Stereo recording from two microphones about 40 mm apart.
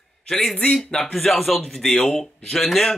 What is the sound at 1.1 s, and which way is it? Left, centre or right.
Speech, centre.